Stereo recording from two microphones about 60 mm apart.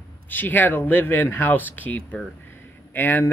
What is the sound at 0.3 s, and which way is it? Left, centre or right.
Speech, left.